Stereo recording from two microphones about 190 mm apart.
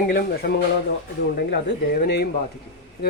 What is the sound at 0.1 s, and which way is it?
Speech, 50° left (ahead or behind).